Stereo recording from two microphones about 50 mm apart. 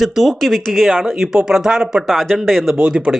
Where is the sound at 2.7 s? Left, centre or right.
Centre.